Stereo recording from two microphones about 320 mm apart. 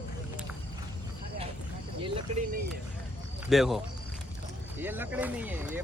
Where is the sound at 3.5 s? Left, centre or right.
Centre.